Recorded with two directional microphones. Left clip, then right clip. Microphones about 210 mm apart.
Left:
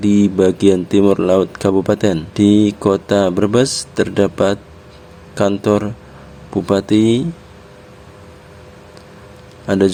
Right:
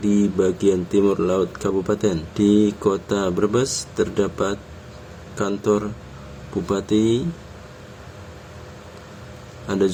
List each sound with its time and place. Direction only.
0.0 s speech: 40° left (ahead or behind)
9.6 s speech: 40° left (ahead or behind)